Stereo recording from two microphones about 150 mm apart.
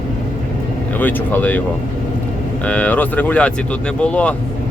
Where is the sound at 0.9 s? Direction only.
10° left (ahead or behind).